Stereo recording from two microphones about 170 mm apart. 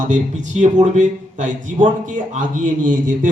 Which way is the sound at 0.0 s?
45° right (ahead or behind).